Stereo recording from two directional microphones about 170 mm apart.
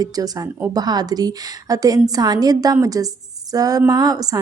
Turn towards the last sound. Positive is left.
turn(degrees=-20)  # may be behind; listen again after turning